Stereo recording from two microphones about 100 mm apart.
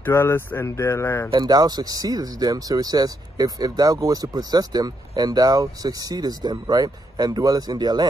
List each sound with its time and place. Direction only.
0.0 s speech: 25° left (ahead or behind)
1.3 s speech: 45° right (ahead or behind)